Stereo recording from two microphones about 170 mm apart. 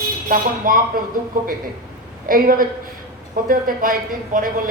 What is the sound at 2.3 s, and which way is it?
Speech, 55° right (ahead or behind).